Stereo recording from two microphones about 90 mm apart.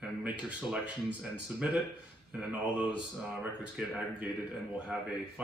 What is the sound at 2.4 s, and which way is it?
Speech, 15° right (ahead or behind).